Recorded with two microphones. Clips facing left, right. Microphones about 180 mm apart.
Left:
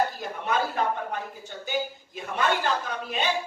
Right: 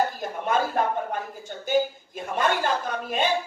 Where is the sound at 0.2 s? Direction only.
50° right (ahead or behind).